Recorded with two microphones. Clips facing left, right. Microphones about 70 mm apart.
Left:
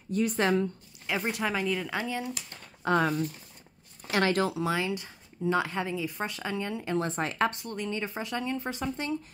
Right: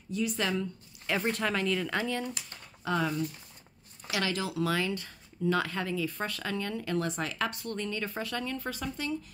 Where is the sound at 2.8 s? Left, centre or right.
Left.